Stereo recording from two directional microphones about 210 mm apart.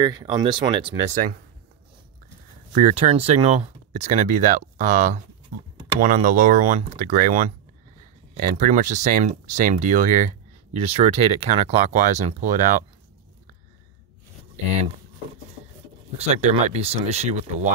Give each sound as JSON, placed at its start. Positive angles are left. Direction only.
{"t": 0.0, "sound": "speech", "side_deg": -20}
{"t": 1.0, "sound": "speech", "side_deg": -35}
{"t": 2.7, "sound": "speech", "side_deg": -35}
{"t": 16.2, "sound": "speech", "side_deg": -30}